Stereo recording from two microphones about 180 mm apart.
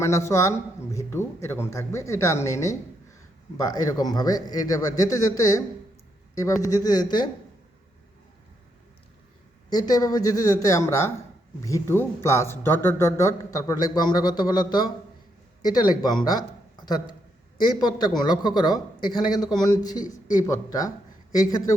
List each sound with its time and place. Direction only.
0.0 s speech: 15° left (ahead or behind)
9.6 s speech: 20° left (ahead or behind)
16.7 s a sound: 25° left (ahead or behind)
17.7 s speech: 20° left (ahead or behind)